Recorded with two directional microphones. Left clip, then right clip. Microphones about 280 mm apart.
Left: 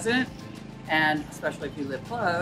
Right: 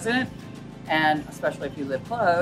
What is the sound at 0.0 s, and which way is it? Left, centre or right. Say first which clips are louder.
Speech: right 1 dB; centre.